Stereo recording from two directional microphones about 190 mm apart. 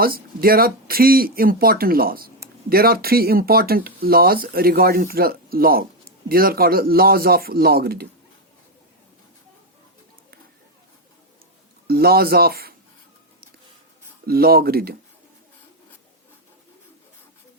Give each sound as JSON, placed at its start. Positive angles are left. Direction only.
{"t": 0.0, "sound": "speech", "side_deg": -50}
{"t": 11.9, "sound": "speech", "side_deg": -55}
{"t": 14.3, "sound": "speech", "side_deg": -55}